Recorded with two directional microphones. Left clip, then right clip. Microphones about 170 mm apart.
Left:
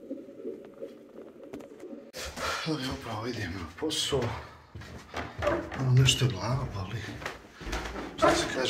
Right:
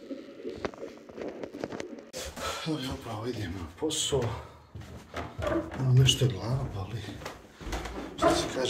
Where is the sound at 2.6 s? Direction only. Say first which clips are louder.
Left 1 dB; 10° right (ahead or behind).